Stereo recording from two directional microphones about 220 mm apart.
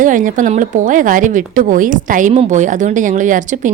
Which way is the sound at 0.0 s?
35° right (ahead or behind).